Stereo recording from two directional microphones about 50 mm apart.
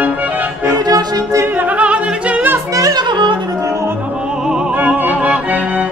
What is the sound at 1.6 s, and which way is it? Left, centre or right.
Opera, right.